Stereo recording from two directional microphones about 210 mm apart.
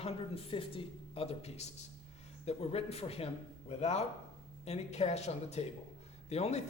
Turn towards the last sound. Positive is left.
turn(degrees=30)  # may be behind; listen again after turning